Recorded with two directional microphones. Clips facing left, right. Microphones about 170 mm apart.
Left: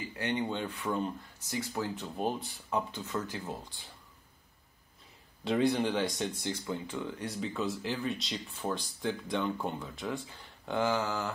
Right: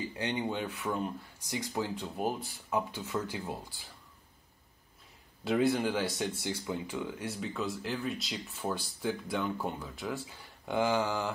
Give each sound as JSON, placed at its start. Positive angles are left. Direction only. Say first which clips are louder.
{"t": 0.1, "sound": "speech", "louder": "left 4 dB", "side_deg": -15}
{"t": 5.4, "sound": "speech", "louder": "even", "side_deg": -5}